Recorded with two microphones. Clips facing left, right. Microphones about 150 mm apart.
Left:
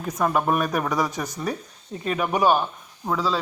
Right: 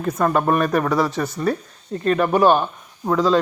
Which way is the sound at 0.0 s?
10° left (ahead or behind).